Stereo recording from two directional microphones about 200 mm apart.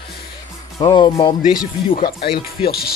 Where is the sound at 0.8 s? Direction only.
20° left (ahead or behind).